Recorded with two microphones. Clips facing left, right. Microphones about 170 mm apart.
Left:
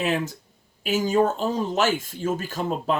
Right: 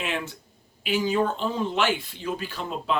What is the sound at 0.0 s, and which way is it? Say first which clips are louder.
Speech: left 6 dB; 40° left (ahead or behind).